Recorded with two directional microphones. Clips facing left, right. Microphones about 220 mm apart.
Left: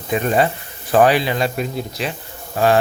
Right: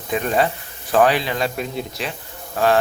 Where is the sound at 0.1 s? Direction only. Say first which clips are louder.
Left 2 dB; centre (ahead or behind).